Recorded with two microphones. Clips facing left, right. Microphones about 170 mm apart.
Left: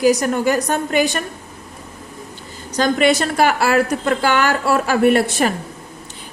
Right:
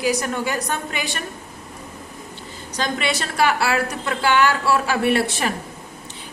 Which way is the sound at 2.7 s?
45° left (ahead or behind).